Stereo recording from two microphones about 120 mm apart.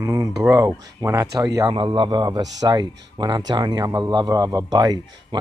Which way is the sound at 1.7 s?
45° right (ahead or behind).